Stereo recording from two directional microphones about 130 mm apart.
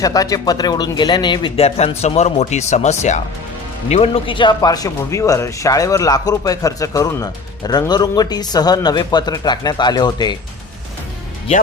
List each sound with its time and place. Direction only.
0.0 s speech: 25° left (ahead or behind)